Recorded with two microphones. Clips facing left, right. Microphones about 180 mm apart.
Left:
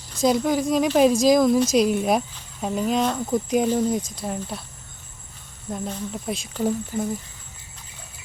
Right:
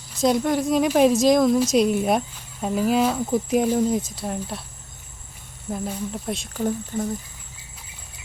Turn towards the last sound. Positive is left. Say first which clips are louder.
# left 1 dB
turn(degrees=5)  # may be behind; listen again after turning